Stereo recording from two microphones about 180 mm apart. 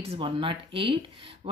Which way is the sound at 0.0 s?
30° right (ahead or behind).